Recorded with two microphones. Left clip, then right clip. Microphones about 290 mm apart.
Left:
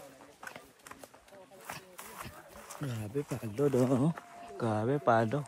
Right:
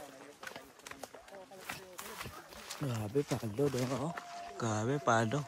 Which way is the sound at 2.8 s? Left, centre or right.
Centre.